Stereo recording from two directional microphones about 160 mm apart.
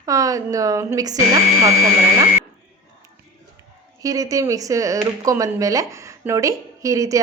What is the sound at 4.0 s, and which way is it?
Speech, 20° right (ahead or behind).